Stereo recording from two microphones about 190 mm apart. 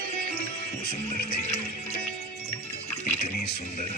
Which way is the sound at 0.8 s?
55° left (ahead or behind).